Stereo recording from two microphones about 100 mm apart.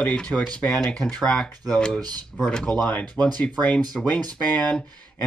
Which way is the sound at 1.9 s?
45° right (ahead or behind).